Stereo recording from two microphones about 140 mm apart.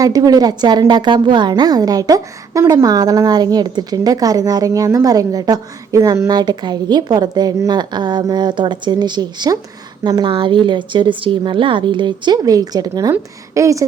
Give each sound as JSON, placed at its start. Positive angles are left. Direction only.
{"t": 0.0, "sound": "a woman's voice", "side_deg": -25}